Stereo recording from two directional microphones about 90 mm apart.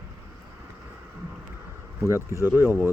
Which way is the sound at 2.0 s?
30° right (ahead or behind).